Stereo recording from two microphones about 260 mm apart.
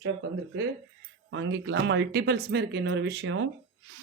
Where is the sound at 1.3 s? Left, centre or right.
Right.